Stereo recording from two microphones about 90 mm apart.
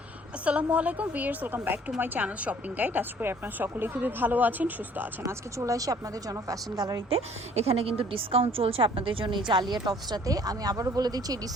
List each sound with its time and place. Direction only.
0.4 s a woman's voice: 15° right (ahead or behind)
5.2 s speech: 35° right (ahead or behind)
7.7 s a woman's voice: 90° right; by 11.3 s 45° right (ahead or behind)